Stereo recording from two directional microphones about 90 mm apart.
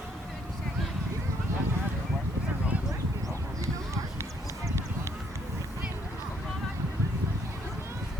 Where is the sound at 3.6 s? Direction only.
35° right (ahead or behind).